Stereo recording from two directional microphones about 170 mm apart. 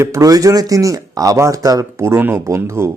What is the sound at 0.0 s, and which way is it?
Speech, 20° right (ahead or behind).